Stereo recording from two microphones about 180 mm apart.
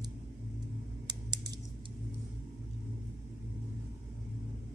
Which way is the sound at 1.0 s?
25° right (ahead or behind).